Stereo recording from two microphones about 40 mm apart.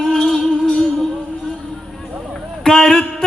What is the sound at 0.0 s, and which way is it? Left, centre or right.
Music, centre.